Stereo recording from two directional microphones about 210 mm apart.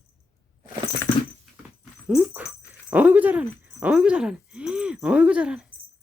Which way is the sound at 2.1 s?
5° right (ahead or behind).